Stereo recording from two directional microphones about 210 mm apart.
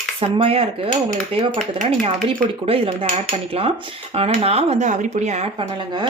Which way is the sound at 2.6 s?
25° right (ahead or behind).